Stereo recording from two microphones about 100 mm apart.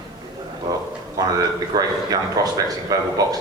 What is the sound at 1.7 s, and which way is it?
Speech, 40° right (ahead or behind).